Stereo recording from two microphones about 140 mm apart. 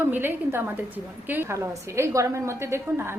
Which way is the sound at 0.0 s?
15° right (ahead or behind).